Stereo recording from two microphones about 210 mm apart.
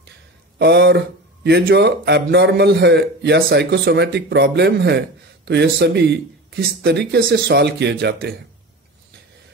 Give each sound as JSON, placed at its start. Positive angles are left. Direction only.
{"t": 0.6, "sound": "speech", "side_deg": -50}